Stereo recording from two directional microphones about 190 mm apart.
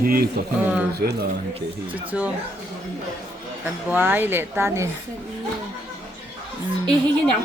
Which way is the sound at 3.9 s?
10° right (ahead or behind).